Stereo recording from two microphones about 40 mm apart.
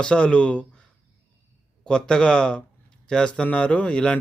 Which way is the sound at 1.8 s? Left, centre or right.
Centre.